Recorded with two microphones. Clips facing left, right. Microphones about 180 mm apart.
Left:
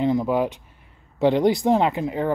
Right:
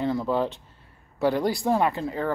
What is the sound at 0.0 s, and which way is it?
Speech, 20° left (ahead or behind).